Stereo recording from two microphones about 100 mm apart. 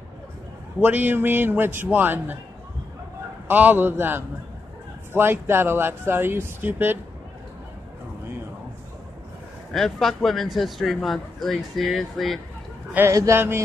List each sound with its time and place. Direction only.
0.7 s speech: 20° right (ahead or behind)
3.4 s speech: 15° right (ahead or behind)
9.7 s a man's voice: 5° left (ahead or behind)
13.1 s speech: 35° right (ahead or behind)